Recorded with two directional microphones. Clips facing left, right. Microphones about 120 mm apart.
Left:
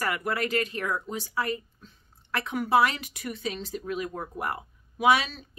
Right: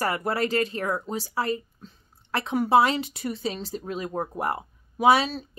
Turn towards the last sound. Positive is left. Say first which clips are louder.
# right 3 dB
turn(degrees=-35)  # may be behind; listen again after turning